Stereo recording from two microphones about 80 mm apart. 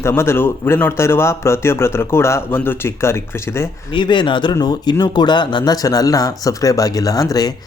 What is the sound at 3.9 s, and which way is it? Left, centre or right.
Speech, left.